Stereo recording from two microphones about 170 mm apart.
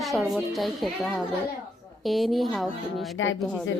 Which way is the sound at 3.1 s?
90° left.